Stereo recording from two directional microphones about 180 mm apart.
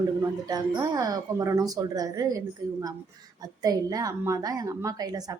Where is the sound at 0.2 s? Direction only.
20° right (ahead or behind).